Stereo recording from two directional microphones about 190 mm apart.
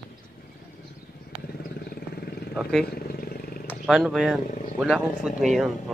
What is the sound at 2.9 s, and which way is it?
Vehicle, 50° left (ahead or behind).